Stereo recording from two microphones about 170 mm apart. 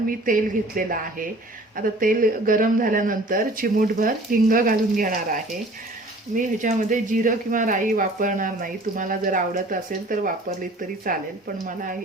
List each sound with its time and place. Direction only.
0.3 s speech: 55° right (ahead or behind)